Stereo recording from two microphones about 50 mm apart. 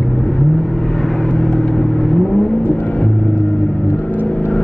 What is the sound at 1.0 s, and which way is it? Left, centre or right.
Vehicle, centre.